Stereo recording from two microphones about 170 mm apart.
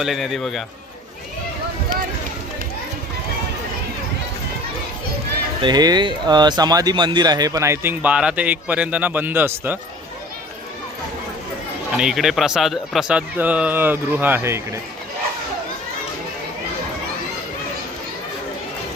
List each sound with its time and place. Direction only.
0.0 s a man's voice: centre (ahead or behind)
5.6 s speech: 25° right (ahead or behind)
11.9 s a man's voice: 5° right (ahead or behind)